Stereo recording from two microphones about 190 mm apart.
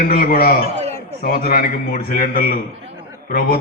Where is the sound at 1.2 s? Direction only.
50° left (ahead or behind).